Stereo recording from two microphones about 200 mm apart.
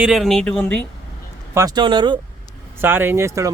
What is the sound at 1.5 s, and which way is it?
Speech, 20° right (ahead or behind).